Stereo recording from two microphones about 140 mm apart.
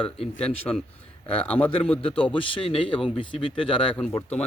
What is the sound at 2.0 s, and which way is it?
Speech, 40° left (ahead or behind).